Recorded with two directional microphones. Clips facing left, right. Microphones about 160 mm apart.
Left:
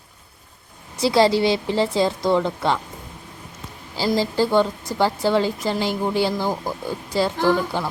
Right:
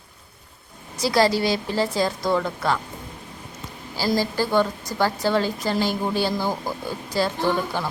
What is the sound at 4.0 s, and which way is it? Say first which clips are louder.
A woman's voice: left 3 dB; 20° left (ahead or behind).